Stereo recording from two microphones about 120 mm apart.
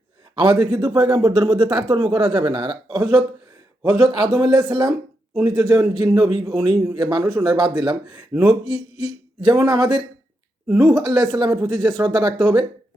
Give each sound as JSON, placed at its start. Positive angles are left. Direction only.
{"t": 0.3, "sound": "speech", "side_deg": -45}
{"t": 11.7, "sound": "speech", "side_deg": 0}
{"t": 11.9, "sound": "speech", "side_deg": -35}